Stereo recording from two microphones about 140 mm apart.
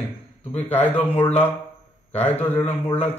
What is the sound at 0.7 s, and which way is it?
A man's voice, 15° left (ahead or behind).